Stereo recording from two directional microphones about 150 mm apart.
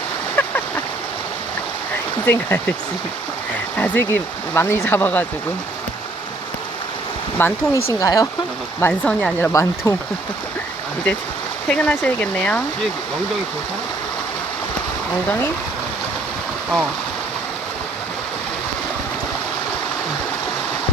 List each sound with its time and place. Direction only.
0.4 s a sound: 10° left (ahead or behind)
2.2 s speech: 15° left (ahead or behind)
3.8 s speech: 15° left (ahead or behind)
7.3 s speech: 15° left (ahead or behind)
8.9 s speech: 5° left (ahead or behind)
9.5 s speech: 20° left (ahead or behind)
11.7 s speech: 10° left (ahead or behind)